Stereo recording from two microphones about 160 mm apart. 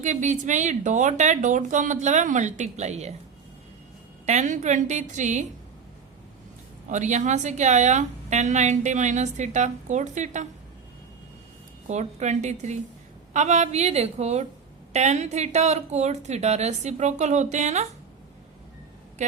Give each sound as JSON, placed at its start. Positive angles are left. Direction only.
{"t": 0.0, "sound": "a woman's voice", "side_deg": -50}
{"t": 4.3, "sound": "a woman's voice", "side_deg": -50}
{"t": 6.8, "sound": "a woman's voice", "side_deg": -50}
{"t": 11.9, "sound": "a woman's voice", "side_deg": -45}